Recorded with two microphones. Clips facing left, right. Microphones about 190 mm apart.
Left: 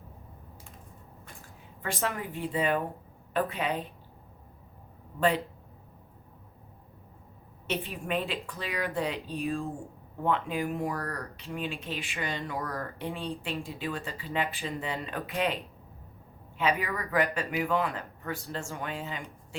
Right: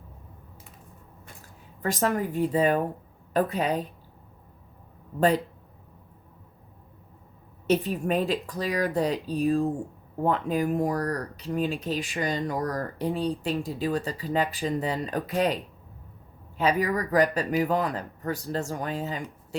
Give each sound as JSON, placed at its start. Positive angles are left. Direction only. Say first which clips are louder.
{"t": 1.8, "sound": "speech", "louder": "right 7 dB", "side_deg": -40}
{"t": 7.7, "sound": "speech", "louder": "right 8 dB", "side_deg": -40}
{"t": 16.6, "sound": "speech", "louder": "right 5 dB", "side_deg": -40}